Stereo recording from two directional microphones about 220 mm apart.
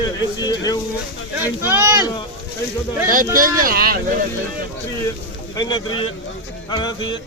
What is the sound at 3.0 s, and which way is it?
Speech, 40° right (ahead or behind).